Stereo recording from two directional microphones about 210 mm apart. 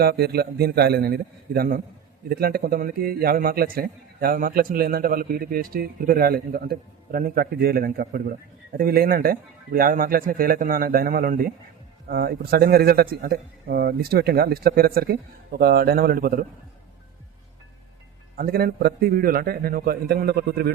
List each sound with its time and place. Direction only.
0.0 s a man's voice: 50° right (ahead or behind)
18.3 s a man's voice: 45° right (ahead or behind)